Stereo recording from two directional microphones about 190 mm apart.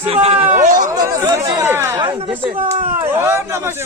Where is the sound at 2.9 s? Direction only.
10° right (ahead or behind).